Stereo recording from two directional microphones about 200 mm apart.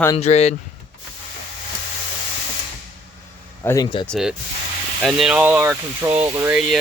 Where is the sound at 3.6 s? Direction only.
20° left (ahead or behind).